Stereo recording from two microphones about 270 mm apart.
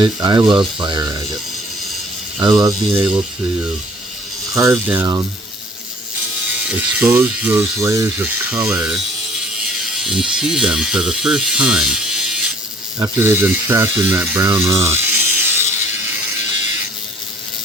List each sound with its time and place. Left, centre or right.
0.0 s speech: centre
2.4 s speech: centre
4.5 s speech: centre
6.7 s speech: centre